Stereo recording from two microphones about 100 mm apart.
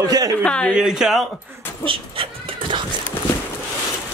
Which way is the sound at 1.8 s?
60° right (ahead or behind).